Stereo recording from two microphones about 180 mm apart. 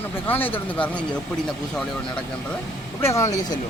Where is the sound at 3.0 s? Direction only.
15° left (ahead or behind).